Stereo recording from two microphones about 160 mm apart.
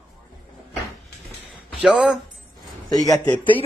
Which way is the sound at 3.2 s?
10° left (ahead or behind).